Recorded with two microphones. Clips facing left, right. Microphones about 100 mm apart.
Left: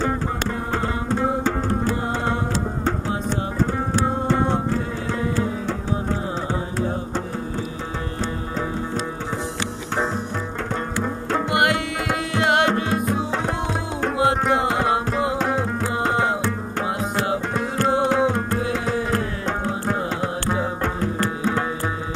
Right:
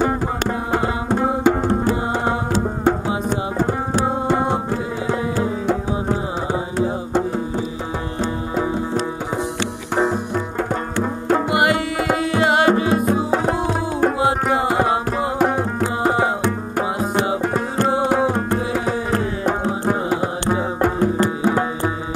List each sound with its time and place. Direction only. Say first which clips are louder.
0.5 s tabla: right 4 dB; 15° right (ahead or behind)
2.8 s music: right 5 dB; 10° right (ahead or behind)
3.9 s tabla: right 2 dB; 10° right (ahead or behind)
9.9 s music: right 5 dB; 15° right (ahead or behind)
11.2 s tabla: right 3 dB; 5° right (ahead or behind)
14.1 s music: right 1 dB; centre (ahead or behind)
19.1 s music: right 4 dB; 20° right (ahead or behind)